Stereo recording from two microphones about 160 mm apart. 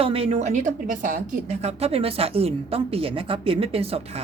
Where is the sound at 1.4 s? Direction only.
40° right (ahead or behind).